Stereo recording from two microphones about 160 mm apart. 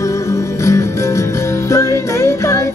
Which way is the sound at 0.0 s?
20° left (ahead or behind).